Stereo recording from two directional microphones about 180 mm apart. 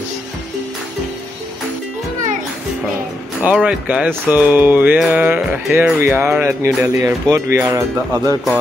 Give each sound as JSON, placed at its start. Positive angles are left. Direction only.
{"t": 3.4, "sound": "speech", "side_deg": -5}